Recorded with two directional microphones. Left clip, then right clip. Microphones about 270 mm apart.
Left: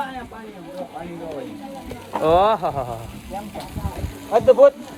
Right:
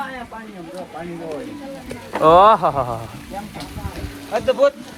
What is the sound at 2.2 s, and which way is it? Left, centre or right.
Speech, centre.